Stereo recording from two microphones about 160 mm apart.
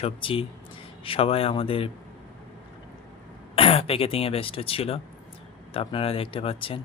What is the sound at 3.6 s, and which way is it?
Speech, 35° left (ahead or behind).